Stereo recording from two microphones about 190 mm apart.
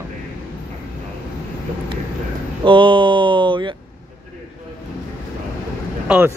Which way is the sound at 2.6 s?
25° right (ahead or behind).